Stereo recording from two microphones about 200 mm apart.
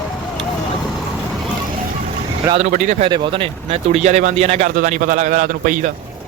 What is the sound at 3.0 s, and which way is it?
Speech, 25° right (ahead or behind).